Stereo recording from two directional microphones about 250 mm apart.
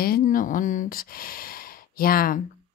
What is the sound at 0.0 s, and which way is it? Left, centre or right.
Speech, left.